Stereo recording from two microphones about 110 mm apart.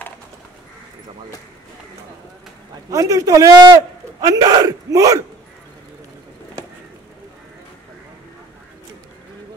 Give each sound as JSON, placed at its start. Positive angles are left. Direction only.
{"t": 2.9, "sound": "speech", "side_deg": -30}